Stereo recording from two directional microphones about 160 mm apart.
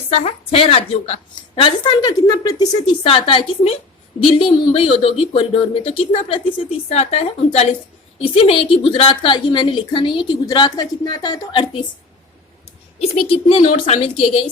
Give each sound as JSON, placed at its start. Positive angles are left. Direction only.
{"t": 0.1, "sound": "speech", "side_deg": 40}
{"t": 3.0, "sound": "speech", "side_deg": 35}
{"t": 13.0, "sound": "a woman's voice", "side_deg": 40}